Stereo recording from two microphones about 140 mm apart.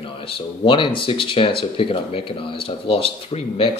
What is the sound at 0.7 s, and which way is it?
A man's voice, 35° left (ahead or behind).